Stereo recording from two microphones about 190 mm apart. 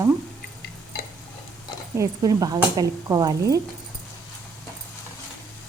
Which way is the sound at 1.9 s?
20° right (ahead or behind).